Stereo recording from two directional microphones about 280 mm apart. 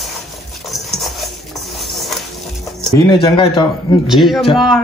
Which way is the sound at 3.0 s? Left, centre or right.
Centre.